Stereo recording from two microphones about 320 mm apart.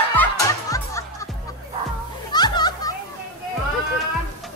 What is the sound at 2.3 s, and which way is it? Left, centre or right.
Children playing, centre.